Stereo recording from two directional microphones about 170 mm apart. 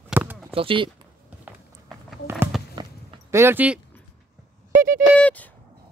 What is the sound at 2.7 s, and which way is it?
Walk, 20° right (ahead or behind).